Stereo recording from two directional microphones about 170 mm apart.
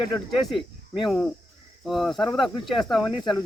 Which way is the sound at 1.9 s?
Centre (ahead or behind).